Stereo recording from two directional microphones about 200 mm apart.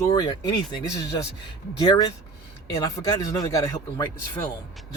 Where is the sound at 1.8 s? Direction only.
20° left (ahead or behind).